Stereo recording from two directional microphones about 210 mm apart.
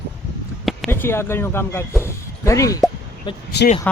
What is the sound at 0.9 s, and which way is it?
Speech, 10° left (ahead or behind).